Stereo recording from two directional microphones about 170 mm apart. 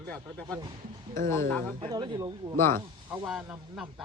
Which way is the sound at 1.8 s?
25° right (ahead or behind).